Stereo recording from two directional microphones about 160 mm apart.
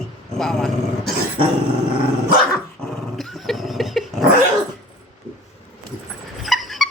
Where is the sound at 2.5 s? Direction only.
Centre (ahead or behind).